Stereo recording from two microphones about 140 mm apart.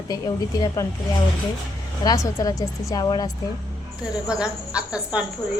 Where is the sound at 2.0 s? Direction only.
25° left (ahead or behind).